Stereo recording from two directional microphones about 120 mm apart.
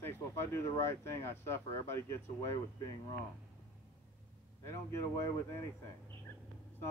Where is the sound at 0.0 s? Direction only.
20° left (ahead or behind).